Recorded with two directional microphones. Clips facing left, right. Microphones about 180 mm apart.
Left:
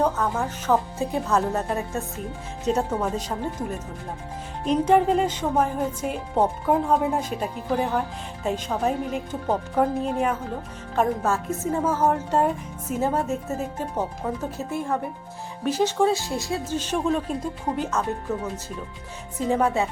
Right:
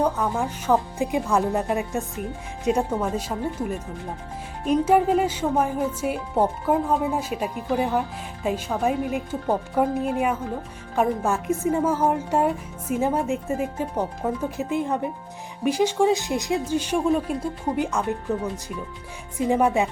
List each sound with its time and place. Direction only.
0.0 s speech: 15° right (ahead or behind)
19.4 s speech: 15° right (ahead or behind)